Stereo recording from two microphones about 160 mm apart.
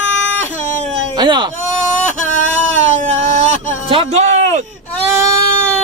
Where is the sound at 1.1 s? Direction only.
30° right (ahead or behind).